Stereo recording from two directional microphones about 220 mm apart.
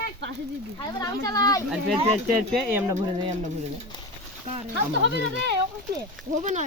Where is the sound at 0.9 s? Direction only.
15° left (ahead or behind).